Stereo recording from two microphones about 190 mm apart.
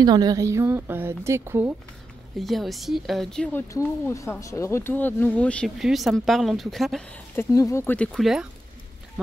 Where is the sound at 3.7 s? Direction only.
15° left (ahead or behind).